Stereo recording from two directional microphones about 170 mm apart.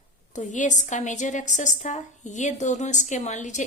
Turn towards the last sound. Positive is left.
turn(degrees=45)  # may be behind; listen again after turning